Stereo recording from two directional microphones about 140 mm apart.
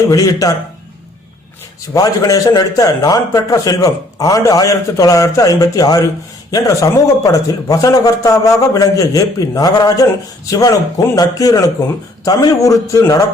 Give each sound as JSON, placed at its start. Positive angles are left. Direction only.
{"t": 0.1, "sound": "a man's voice", "side_deg": 25}
{"t": 1.9, "sound": "a man's voice", "side_deg": 25}